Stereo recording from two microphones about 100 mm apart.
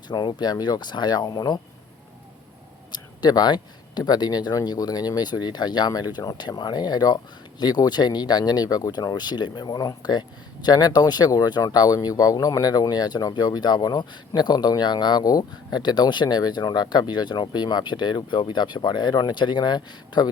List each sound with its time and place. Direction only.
0.1 s speech: 45° left (ahead or behind)
2.9 s speech: 45° left (ahead or behind)